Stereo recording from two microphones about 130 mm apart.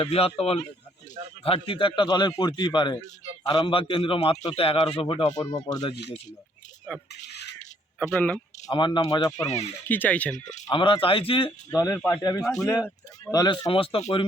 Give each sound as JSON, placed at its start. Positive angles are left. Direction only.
{"t": 0.0, "sound": "speech", "side_deg": 45}
{"t": 3.8, "sound": "speech", "side_deg": 40}
{"t": 7.9, "sound": "speech", "side_deg": 10}
{"t": 8.7, "sound": "speech", "side_deg": 35}
{"t": 9.8, "sound": "speech", "side_deg": 15}
{"t": 10.7, "sound": "speech", "side_deg": 40}
{"t": 11.7, "sound": "speech", "side_deg": 25}
{"t": 13.7, "sound": "speech", "side_deg": 45}